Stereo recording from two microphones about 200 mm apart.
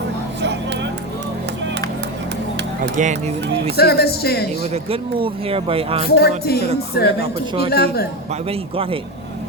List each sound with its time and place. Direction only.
0.4 s vehicle: 60° right (ahead or behind)
2.9 s speech: 35° right (ahead or behind)
3.8 s music: 50° left (ahead or behind)
4.6 s speech: 30° right (ahead or behind)
6.1 s music: 50° left (ahead or behind)
8.3 s speech: 30° right (ahead or behind)